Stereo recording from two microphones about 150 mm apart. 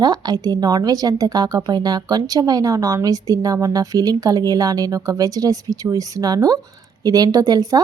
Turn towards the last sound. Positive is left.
turn(degrees=-25)  # may be behind; listen again after turning